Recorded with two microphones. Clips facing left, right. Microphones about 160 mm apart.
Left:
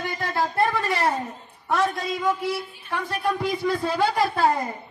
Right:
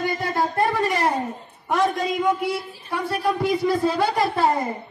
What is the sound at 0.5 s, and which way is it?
Speech, 15° right (ahead or behind).